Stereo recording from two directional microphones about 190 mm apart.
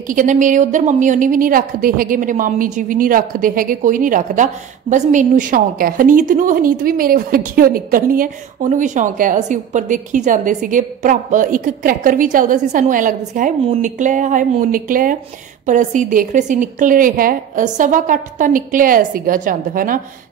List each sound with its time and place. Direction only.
0.1 s a woman's voice: 45° right (ahead or behind)